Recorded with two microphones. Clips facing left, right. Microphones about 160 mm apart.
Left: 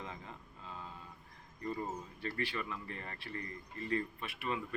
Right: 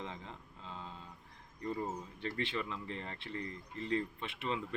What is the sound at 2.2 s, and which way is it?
Speech, 20° right (ahead or behind).